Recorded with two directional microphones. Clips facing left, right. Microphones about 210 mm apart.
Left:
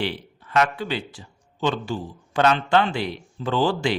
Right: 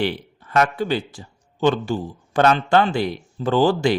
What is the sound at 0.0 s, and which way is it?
A man's voice, 45° right (ahead or behind).